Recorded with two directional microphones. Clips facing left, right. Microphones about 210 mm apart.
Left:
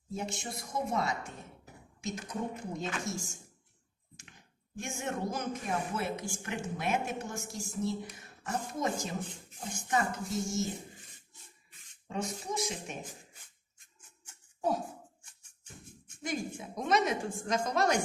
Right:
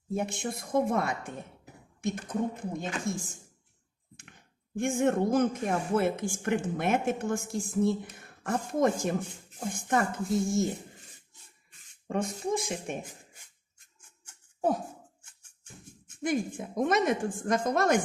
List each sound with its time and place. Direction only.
0.1 s speech: 55° right (ahead or behind)
4.8 s speech: 55° right (ahead or behind)
12.0 s speech: 55° right (ahead or behind)
16.2 s speech: 50° right (ahead or behind)